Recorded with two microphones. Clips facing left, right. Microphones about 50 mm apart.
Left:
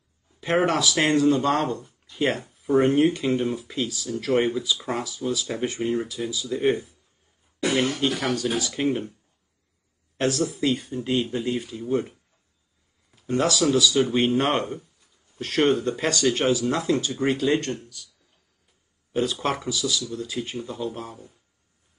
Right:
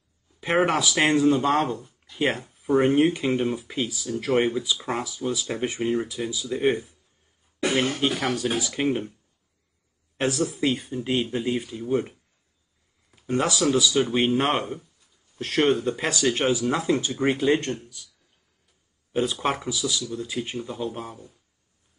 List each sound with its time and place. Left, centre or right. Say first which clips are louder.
0.7 s speech: even; centre
8.0 s speech: even; centre
10.1 s speech: left 1 dB; centre
17.4 s speech: right 1 dB; right
19.1 s speech: even; centre